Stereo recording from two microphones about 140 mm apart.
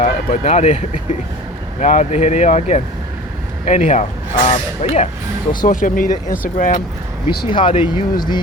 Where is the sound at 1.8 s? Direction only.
65° left (ahead or behind).